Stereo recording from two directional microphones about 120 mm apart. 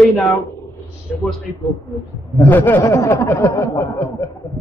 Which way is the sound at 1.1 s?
Centre (ahead or behind).